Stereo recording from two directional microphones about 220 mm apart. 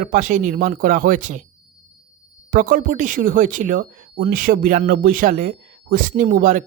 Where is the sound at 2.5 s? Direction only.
35° right (ahead or behind).